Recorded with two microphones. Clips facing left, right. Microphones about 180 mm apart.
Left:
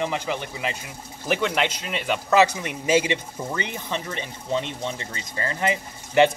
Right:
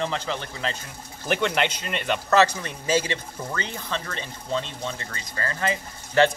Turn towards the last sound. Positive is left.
turn(degrees=15)  # may be behind; listen again after turning